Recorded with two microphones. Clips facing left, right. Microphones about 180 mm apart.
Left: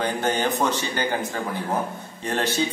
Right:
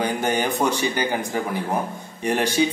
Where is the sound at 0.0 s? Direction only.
10° right (ahead or behind).